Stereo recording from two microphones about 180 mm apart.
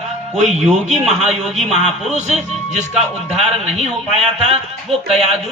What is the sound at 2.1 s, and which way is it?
A man's voice, 40° right (ahead or behind).